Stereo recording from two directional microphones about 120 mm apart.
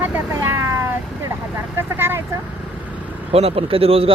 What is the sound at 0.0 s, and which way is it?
Vehicle, 15° right (ahead or behind).